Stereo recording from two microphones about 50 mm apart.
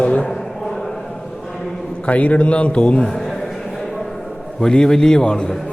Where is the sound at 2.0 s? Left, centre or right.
Left.